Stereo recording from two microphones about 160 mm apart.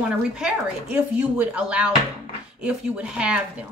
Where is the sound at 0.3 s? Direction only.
5° right (ahead or behind).